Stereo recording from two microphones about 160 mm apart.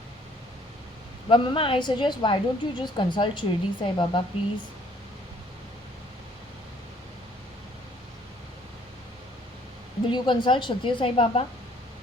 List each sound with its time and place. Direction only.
1.3 s a woman's voice: 30° left (ahead or behind)
10.1 s a woman's voice: 30° left (ahead or behind)